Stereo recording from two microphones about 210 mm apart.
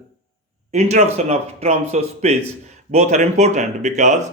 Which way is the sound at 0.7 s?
30° right (ahead or behind).